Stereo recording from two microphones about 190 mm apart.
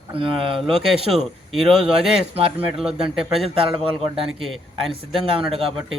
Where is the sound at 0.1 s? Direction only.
30° right (ahead or behind).